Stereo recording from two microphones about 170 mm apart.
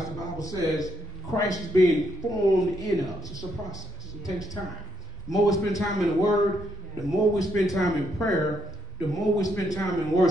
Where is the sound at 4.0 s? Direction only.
20° left (ahead or behind).